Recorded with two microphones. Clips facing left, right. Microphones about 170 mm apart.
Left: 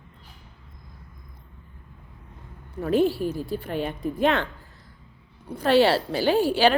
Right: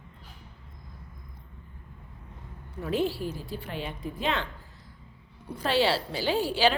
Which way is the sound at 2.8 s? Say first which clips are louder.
Left 7 dB; 50° left (ahead or behind).